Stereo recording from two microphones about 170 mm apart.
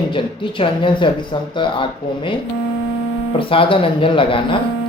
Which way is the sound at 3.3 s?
30° left (ahead or behind).